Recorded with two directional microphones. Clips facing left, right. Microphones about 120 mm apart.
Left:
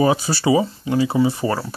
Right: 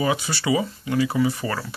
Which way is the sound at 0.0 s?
35° left (ahead or behind).